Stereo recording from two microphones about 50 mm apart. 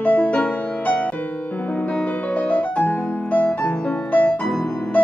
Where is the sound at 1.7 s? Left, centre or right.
Left.